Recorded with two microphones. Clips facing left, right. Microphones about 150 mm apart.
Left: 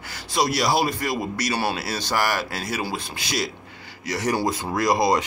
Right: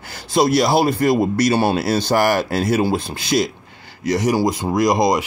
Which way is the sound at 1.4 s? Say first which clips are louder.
Right 9 dB; 50° right (ahead or behind).